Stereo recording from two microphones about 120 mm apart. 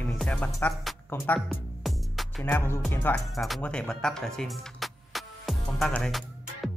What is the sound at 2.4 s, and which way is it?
Speech, 20° left (ahead or behind).